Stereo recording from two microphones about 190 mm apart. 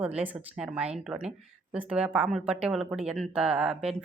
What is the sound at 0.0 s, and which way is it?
Speech, 5° right (ahead or behind).